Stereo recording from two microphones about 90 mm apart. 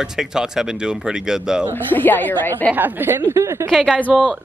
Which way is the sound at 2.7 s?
20° right (ahead or behind).